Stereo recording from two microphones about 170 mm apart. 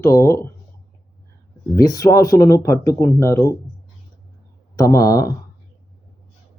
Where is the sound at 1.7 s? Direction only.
20° left (ahead or behind).